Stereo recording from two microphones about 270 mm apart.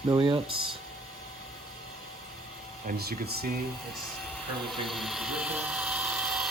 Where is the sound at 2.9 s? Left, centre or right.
Right.